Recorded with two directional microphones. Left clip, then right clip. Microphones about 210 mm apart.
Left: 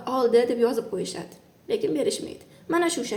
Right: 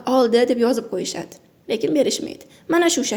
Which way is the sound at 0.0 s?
40° right (ahead or behind).